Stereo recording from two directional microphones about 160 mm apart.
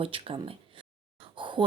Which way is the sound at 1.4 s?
30° right (ahead or behind).